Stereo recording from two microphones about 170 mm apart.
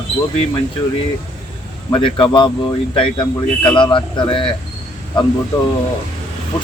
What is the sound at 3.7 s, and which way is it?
Speech, 30° left (ahead or behind).